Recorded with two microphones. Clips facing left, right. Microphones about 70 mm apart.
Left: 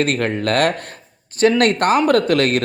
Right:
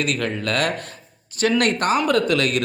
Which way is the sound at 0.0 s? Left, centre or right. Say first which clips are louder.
Left 5 dB; left.